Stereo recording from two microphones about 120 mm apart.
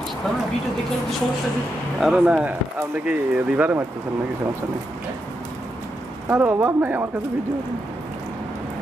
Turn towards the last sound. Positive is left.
turn(degrees=-20)  # may be behind; listen again after turning